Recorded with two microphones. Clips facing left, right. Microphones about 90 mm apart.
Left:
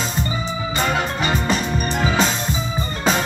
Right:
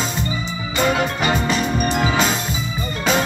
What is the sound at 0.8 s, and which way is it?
Music, 35° left (ahead or behind).